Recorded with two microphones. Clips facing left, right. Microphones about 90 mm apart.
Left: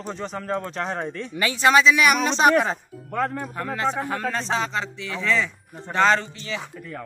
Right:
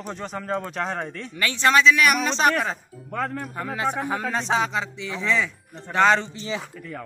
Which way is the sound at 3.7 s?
15° right (ahead or behind).